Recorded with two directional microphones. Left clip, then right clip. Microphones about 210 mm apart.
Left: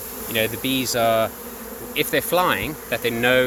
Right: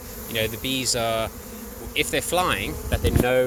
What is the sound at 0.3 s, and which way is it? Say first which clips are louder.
Speech: left 3 dB; 25° left (ahead or behind).